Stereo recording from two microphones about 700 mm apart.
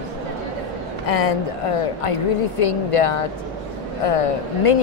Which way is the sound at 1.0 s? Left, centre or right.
Left.